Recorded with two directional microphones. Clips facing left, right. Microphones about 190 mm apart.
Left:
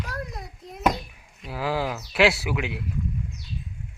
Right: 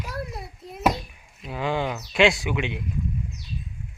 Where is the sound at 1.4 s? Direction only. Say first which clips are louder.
Right 1 dB; 5° left (ahead or behind).